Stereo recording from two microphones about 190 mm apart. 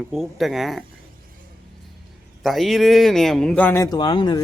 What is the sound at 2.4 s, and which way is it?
Speech, centre (ahead or behind).